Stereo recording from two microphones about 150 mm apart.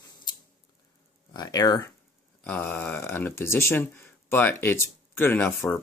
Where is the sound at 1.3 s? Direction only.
25° left (ahead or behind).